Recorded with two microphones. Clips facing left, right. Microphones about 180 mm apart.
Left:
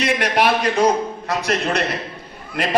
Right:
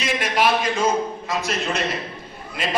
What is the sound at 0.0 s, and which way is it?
A man's voice, 65° left (ahead or behind).